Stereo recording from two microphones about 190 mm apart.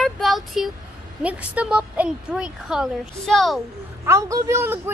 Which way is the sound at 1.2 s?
5° right (ahead or behind).